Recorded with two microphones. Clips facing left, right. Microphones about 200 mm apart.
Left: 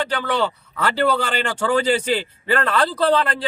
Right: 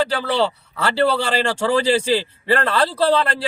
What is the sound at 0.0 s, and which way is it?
A man's voice, 30° right (ahead or behind).